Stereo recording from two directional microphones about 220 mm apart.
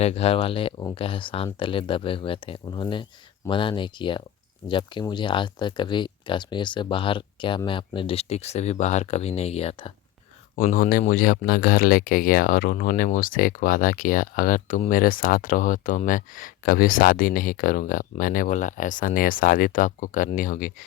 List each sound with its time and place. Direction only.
0.0 s speech: 25° left (ahead or behind)
10.5 s speech: 35° left (ahead or behind)